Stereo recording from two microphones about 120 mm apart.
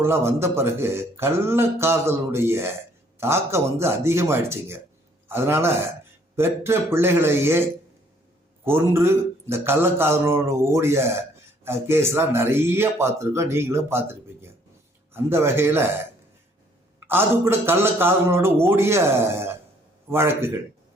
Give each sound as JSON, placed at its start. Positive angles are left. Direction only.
{"t": 0.0, "sound": "speech", "side_deg": -20}
{"t": 8.6, "sound": "speech", "side_deg": -20}
{"t": 15.1, "sound": "speech", "side_deg": -20}
{"t": 17.1, "sound": "speech", "side_deg": -20}